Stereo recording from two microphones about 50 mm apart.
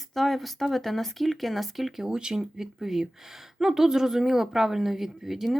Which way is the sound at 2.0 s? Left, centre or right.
Centre.